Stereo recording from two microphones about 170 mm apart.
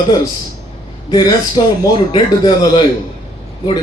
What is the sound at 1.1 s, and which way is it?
A man's voice, 25° left (ahead or behind).